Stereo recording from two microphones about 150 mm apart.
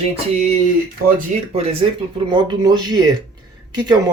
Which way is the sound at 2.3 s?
30° right (ahead or behind).